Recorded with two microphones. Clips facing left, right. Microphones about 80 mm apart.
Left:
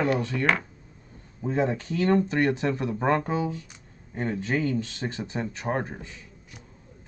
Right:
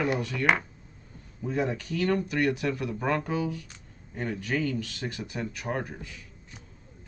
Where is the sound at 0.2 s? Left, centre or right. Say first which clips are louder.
Left 1 dB; left.